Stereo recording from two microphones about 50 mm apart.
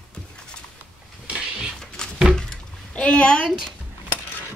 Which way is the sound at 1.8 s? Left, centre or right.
Centre.